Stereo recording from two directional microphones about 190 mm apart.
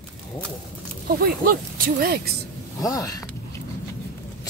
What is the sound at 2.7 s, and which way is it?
Speech, 20° left (ahead or behind).